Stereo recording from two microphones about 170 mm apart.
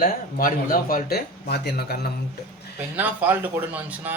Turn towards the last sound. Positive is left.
turn(degrees=-10)  # may be behind; listen again after turning